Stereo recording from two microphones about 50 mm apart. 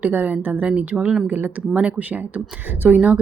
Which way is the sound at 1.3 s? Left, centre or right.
Right.